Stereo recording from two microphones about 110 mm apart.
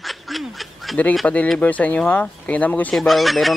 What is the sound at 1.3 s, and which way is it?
Speech, 10° left (ahead or behind).